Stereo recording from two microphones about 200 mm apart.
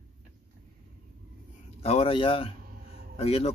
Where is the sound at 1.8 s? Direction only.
30° left (ahead or behind).